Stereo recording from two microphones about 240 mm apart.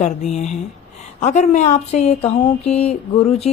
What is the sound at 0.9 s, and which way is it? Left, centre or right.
Mantra, left.